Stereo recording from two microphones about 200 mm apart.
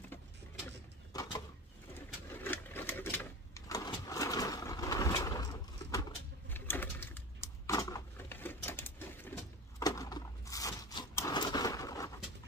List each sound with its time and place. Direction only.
1.1 s a sound: 20° left (ahead or behind)
2.3 s sewing machine: 10° left (ahead or behind)
6.5 s pigeon: 10° left (ahead or behind)